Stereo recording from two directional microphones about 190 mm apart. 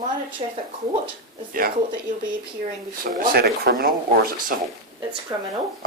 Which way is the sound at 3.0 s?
55° right (ahead or behind).